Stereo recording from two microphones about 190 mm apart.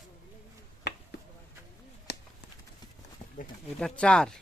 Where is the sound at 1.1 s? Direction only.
60° left (ahead or behind).